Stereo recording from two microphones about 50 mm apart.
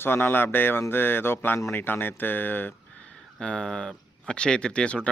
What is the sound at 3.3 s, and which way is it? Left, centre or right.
Speech, centre.